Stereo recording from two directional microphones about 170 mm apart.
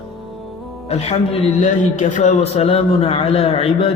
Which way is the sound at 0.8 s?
40° left (ahead or behind).